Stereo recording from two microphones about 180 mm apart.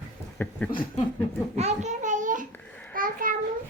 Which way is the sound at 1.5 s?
40° right (ahead or behind).